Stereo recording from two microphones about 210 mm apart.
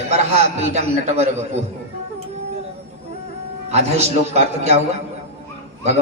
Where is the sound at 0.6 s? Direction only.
30° right (ahead or behind).